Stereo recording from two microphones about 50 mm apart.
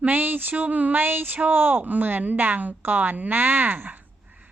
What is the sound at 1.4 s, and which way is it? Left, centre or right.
Speech, right.